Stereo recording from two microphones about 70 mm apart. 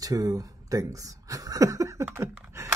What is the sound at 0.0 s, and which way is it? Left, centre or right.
Speech, right.